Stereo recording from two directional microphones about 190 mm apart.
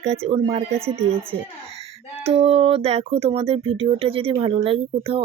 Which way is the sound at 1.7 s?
30° right (ahead or behind).